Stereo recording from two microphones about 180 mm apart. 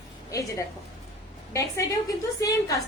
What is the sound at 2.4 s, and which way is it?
Speech, 20° left (ahead or behind).